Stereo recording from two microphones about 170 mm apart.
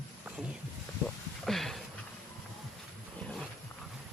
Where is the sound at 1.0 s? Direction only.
Centre (ahead or behind).